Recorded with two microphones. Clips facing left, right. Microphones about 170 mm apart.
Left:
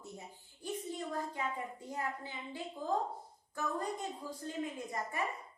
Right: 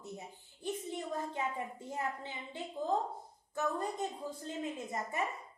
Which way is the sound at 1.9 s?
25° right (ahead or behind).